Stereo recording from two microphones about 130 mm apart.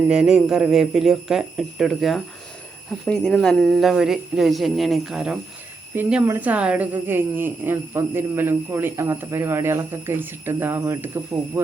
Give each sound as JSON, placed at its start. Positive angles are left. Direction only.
{"t": 0.1, "sound": "speech", "side_deg": -5}